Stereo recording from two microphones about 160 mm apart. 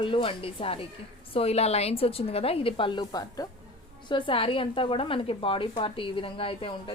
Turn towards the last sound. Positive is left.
turn(degrees=35)  # may be behind; listen again after turning